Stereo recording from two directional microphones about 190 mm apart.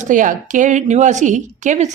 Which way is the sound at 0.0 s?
45° right (ahead or behind).